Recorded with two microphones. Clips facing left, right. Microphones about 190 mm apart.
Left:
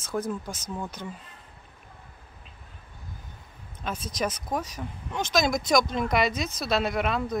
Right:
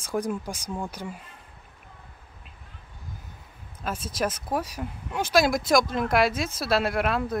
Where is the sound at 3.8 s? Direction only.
5° right (ahead or behind).